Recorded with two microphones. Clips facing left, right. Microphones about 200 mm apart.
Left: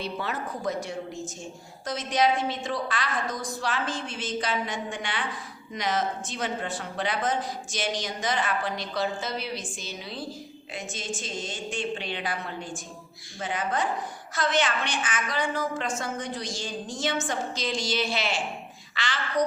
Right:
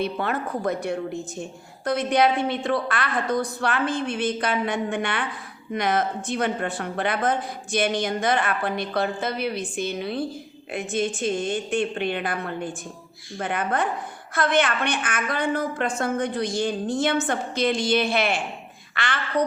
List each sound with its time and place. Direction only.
0.0 s a woman's voice: 55° right (ahead or behind)